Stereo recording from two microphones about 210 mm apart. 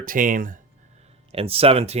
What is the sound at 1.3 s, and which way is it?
Speech, 25° right (ahead or behind).